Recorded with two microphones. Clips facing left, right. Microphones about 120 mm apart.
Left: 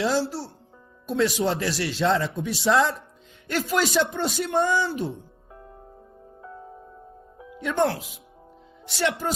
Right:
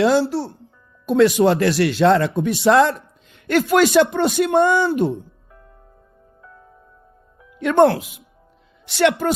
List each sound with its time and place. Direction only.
0.0 s speech: 60° right (ahead or behind)
6.4 s music: 25° left (ahead or behind)
7.6 s speech: 65° right (ahead or behind)